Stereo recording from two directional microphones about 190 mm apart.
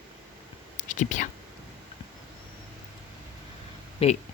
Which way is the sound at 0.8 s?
40° left (ahead or behind).